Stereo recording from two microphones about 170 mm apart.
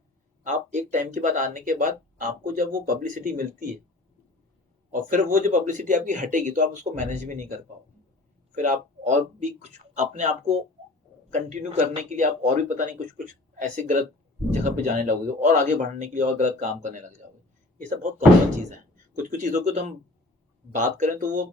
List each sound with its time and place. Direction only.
0.4 s speech: 45° right (ahead or behind)
4.9 s speech: 50° right (ahead or behind)
8.5 s speech: 45° right (ahead or behind)
19.1 s speech: 50° right (ahead or behind)